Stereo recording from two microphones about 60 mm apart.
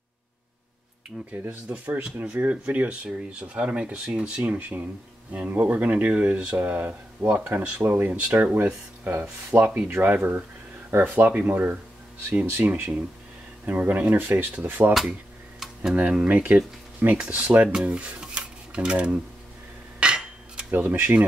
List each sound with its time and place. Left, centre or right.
1.1 s speech: centre
12.4 s speech: right
13.7 s speech: right
16.0 s speech: right
20.0 s cutlery: centre
20.7 s speech: right